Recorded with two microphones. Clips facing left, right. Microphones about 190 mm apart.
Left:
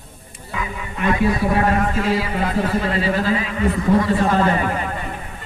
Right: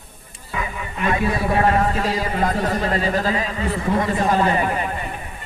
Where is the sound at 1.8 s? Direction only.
40° right (ahead or behind).